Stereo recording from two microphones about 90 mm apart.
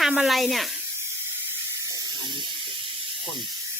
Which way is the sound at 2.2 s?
60° right (ahead or behind).